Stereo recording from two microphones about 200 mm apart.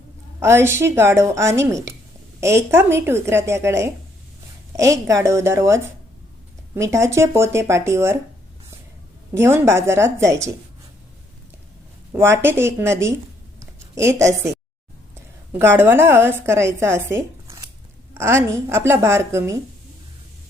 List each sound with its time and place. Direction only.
0.3 s a woman's voice: 15° right (ahead or behind)
9.4 s a woman's voice: 15° right (ahead or behind)
12.1 s a woman's voice: 10° right (ahead or behind)
13.6 s a sound: 15° right (ahead or behind)
15.1 s a woman's voice: 10° right (ahead or behind)